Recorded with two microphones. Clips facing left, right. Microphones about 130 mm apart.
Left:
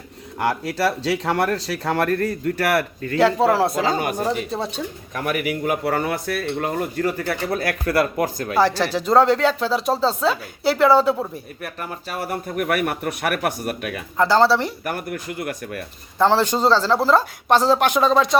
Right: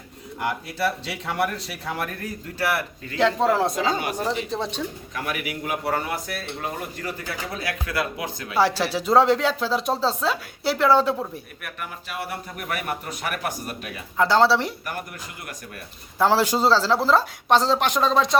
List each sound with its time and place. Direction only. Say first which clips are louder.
0.3 s speech: left 5 dB; 75° left (ahead or behind); by 3.2 s 55° left (ahead or behind)
3.2 s speech: left 3 dB; 5° left (ahead or behind)
3.8 s speech: left 3 dB; 45° left (ahead or behind)
8.8 s speech: left 2 dB; centre (ahead or behind)
11.6 s speech: left 6 dB; 35° left (ahead or behind); by 14.0 s 60° left (ahead or behind)
14.2 s speech: left 2 dB; centre (ahead or behind)
14.8 s speech: left 7 dB; 55° left (ahead or behind)
16.1 s speech: left 2 dB; 5° right (ahead or behind)